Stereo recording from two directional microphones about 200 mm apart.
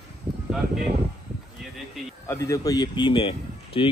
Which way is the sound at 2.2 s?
15° left (ahead or behind).